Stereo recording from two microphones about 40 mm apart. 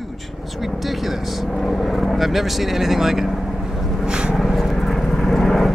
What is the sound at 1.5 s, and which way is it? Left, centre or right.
Vehicle, centre.